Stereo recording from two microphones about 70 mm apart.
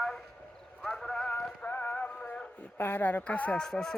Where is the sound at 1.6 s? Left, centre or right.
Left.